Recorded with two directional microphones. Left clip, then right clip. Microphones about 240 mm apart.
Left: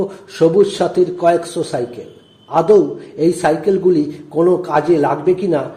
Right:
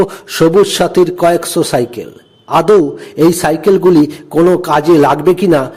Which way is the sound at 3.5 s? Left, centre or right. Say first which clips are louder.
Right 4 dB; right.